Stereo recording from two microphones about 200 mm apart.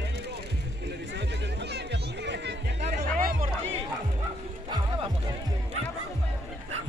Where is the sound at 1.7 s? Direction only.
60° right (ahead or behind).